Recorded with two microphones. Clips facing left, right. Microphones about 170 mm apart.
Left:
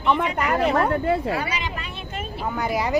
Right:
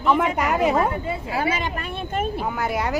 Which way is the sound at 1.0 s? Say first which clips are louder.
Left 7 dB; 65° left (ahead or behind).